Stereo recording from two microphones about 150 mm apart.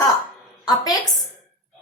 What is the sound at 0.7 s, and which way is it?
Speech, 25° left (ahead or behind).